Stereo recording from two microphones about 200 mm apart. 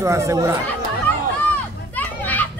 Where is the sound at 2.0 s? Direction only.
10° left (ahead or behind).